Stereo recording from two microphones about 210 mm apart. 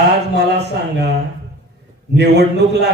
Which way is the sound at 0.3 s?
55° right (ahead or behind).